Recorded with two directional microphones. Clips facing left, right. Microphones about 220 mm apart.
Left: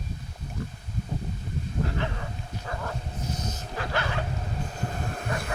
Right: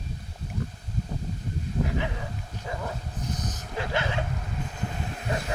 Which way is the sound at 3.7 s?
20° right (ahead or behind).